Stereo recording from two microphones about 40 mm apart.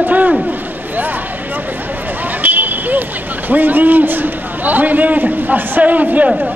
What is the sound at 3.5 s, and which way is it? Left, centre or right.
A man's voice, right.